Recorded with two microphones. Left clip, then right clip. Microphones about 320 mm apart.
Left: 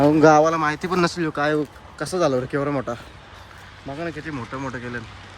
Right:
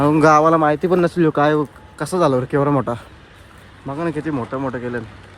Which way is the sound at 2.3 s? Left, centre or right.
Right.